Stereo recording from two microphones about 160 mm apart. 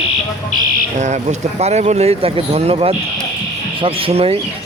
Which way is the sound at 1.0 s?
45° right (ahead or behind).